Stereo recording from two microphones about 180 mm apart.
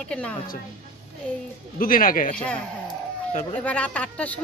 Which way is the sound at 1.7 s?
50° left (ahead or behind).